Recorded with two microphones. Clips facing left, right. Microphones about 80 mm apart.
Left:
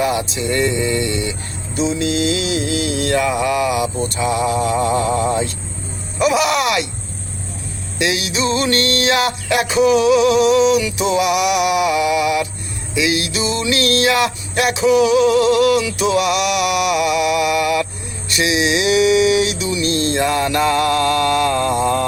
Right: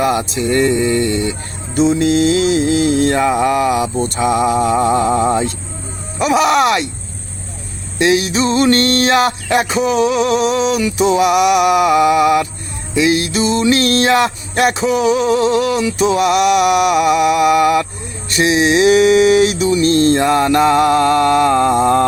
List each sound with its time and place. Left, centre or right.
0.0 s music: right
1.7 s music: right
7.9 s music: right